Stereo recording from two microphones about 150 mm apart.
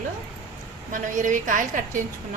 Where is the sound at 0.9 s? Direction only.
60° right (ahead or behind).